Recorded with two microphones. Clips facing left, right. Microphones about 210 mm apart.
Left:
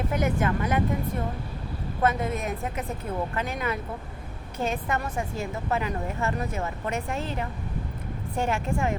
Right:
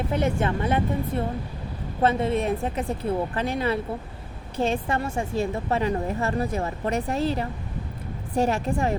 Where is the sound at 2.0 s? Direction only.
30° right (ahead or behind).